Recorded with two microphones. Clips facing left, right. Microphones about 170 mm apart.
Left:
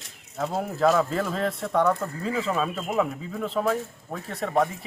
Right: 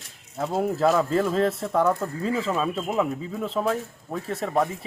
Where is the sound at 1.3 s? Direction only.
30° right (ahead or behind).